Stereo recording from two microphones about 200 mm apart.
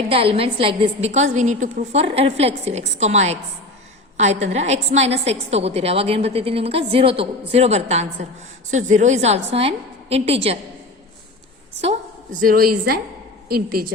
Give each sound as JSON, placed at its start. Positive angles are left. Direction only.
{"t": 0.1, "sound": "a woman's voice", "side_deg": -30}
{"t": 11.8, "sound": "a woman's voice", "side_deg": -35}